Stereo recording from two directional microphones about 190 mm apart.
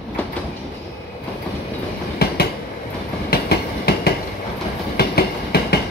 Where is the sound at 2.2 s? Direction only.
55° left (ahead or behind).